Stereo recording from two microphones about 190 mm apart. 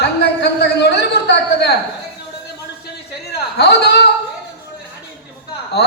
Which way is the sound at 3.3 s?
60° left (ahead or behind).